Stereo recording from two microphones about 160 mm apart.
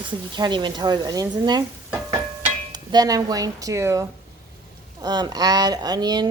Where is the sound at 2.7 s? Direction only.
25° right (ahead or behind).